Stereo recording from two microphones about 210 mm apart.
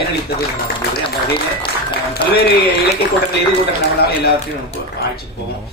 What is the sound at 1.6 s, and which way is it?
Speech, 25° left (ahead or behind).